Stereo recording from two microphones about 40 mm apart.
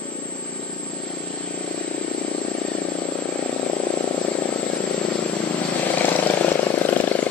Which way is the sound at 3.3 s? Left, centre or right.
Left.